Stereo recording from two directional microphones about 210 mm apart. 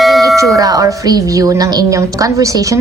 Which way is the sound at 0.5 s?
15° right (ahead or behind).